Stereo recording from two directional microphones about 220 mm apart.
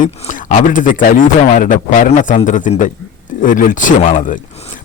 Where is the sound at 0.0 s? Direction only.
35° left (ahead or behind).